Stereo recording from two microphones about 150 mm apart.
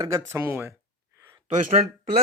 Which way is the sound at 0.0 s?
20° right (ahead or behind).